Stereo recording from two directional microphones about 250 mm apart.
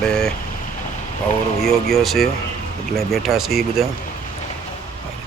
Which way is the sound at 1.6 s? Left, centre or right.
Centre.